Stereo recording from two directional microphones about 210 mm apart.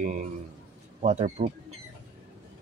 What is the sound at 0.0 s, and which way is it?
Speech, 35° right (ahead or behind).